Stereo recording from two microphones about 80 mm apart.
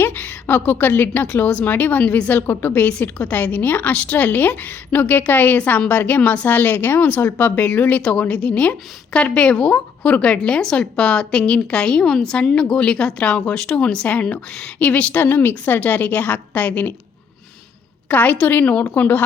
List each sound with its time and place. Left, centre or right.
0.0 s a woman's voice: left
18.1 s a woman's voice: centre